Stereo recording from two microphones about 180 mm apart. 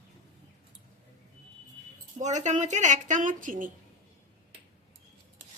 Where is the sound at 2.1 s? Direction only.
40° right (ahead or behind).